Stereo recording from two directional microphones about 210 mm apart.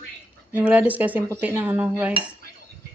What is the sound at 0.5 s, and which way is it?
Cutlery, 10° right (ahead or behind).